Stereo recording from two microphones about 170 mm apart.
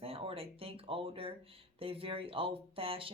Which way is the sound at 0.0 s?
35° right (ahead or behind).